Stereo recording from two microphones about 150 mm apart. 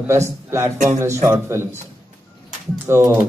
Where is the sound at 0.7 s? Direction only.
50° right (ahead or behind).